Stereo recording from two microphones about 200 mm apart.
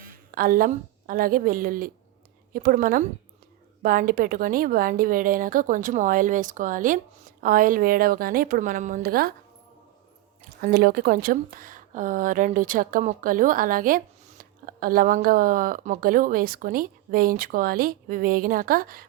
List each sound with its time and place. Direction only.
0.0 s a woman's voice: 45° right (ahead or behind)
10.6 s speech: 50° right (ahead or behind)